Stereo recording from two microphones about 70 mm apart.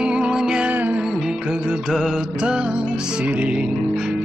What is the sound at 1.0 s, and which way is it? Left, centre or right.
Music of bollywood, centre.